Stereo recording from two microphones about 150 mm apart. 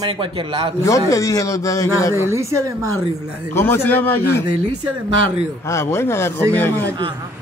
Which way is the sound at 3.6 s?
15° left (ahead or behind).